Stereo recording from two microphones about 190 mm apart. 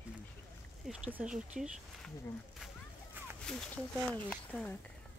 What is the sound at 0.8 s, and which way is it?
Speech, 5° right (ahead or behind).